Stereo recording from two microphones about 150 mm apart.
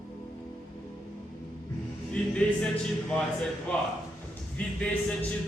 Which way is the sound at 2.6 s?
5° left (ahead or behind).